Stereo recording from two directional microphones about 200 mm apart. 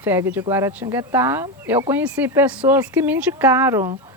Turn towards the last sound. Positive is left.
turn(degrees=-15)  # may be behind; listen again after turning